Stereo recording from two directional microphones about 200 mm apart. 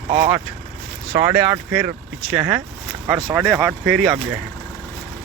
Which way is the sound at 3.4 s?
Centre (ahead or behind).